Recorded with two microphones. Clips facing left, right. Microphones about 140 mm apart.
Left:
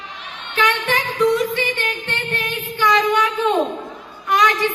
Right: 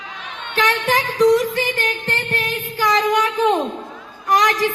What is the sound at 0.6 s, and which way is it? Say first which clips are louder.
Music: right 1 dB; 40° right (ahead or behind).